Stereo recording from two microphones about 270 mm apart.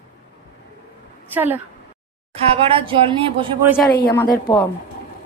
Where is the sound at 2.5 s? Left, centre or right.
Centre.